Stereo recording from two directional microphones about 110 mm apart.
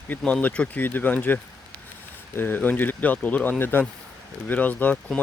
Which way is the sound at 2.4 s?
15° left (ahead or behind).